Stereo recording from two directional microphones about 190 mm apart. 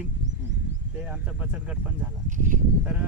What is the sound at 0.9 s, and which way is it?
Speech, 5° right (ahead or behind).